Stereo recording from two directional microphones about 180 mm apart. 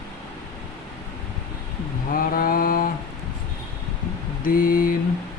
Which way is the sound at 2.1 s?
50° left (ahead or behind).